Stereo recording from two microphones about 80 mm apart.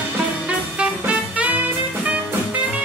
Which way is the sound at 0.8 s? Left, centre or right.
Centre.